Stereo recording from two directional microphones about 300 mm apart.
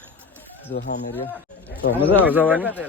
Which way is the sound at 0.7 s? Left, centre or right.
Left.